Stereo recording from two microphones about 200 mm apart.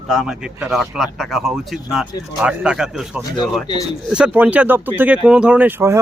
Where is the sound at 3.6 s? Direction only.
20° left (ahead or behind).